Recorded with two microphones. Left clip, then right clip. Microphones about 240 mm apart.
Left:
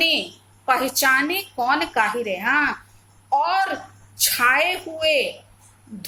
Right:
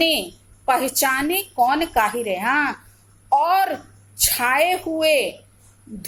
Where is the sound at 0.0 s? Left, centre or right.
Centre.